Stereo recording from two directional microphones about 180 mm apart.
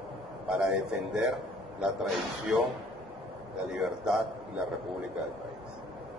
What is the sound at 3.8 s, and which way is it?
Speech, 5° right (ahead or behind).